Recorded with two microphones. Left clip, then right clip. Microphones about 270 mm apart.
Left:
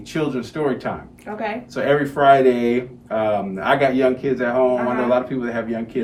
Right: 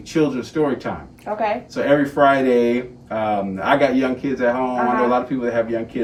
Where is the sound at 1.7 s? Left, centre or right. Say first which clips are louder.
Even; centre.